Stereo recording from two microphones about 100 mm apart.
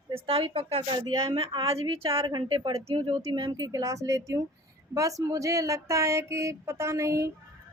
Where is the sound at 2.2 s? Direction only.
45° right (ahead or behind).